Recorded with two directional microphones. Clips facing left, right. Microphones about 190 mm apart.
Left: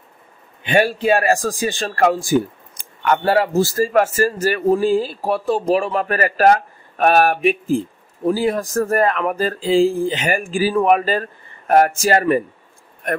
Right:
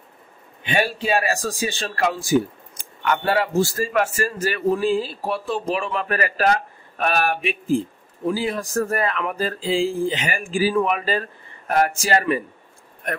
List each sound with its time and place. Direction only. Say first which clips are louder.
0.7 s speech: left 6 dB; 50° left (ahead or behind)